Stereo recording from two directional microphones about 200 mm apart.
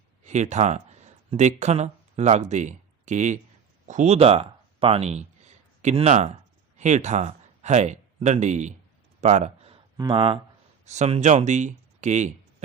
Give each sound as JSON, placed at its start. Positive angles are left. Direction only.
{"t": 0.3, "sound": "speech", "side_deg": -35}
{"t": 9.2, "sound": "a sound", "side_deg": -35}
{"t": 10.0, "sound": "speech", "side_deg": -25}